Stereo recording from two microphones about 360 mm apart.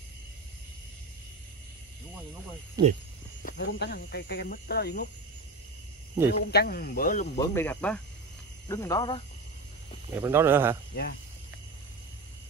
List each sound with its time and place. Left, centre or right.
2.8 s speech: centre
3.4 s speech: left
6.3 s speech: left
7.3 s speech: centre
10.1 s speech: centre